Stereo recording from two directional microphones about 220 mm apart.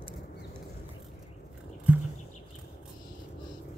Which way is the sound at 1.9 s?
5° right (ahead or behind).